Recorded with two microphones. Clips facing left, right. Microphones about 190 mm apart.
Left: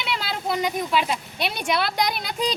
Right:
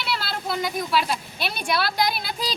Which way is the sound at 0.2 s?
15° left (ahead or behind).